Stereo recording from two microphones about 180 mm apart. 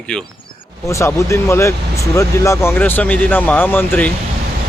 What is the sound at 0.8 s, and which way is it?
Speech, 15° left (ahead or behind).